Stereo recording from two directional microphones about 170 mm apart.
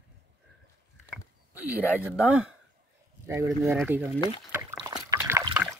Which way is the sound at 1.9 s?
10° right (ahead or behind).